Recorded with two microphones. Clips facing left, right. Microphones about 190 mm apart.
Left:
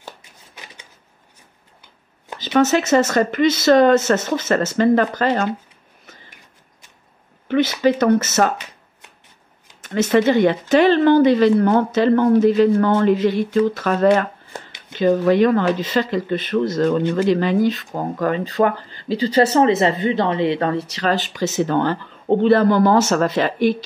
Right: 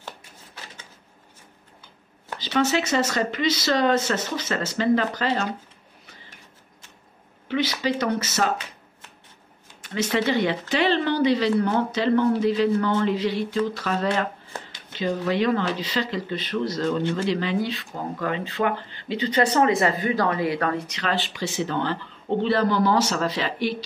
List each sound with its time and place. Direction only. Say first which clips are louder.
2.3 s speech: left 6 dB; 45° left (ahead or behind)
7.4 s speech: left 8 dB; 50° left (ahead or behind)
9.8 s speech: left 8 dB; 45° left (ahead or behind); by 20.8 s 25° left (ahead or behind)
20.9 s speech: left 6 dB; 40° left (ahead or behind)